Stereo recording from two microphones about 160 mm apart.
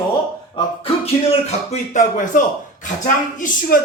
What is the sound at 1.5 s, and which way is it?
A man's voice, 45° left (ahead or behind).